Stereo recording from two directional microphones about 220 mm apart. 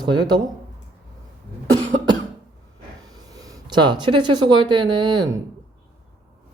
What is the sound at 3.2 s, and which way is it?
Speech, 15° right (ahead or behind).